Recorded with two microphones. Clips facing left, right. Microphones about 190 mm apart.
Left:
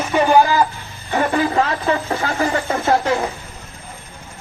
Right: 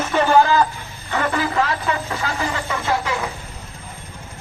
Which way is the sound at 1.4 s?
30° left (ahead or behind).